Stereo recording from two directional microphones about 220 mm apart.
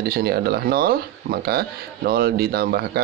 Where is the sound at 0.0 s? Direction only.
45° right (ahead or behind).